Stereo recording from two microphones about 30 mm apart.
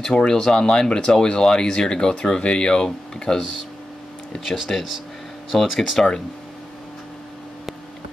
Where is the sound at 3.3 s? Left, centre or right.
Centre.